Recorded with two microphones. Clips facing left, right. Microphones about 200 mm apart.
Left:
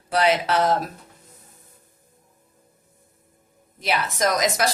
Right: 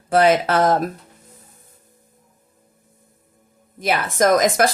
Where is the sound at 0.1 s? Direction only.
50° right (ahead or behind).